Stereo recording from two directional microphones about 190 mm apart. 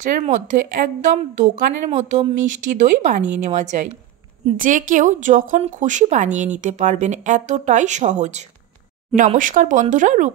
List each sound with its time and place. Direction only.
0.0 s speech: 40° right (ahead or behind)